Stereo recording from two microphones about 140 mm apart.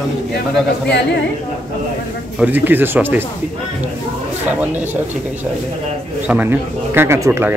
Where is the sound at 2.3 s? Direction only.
10° right (ahead or behind).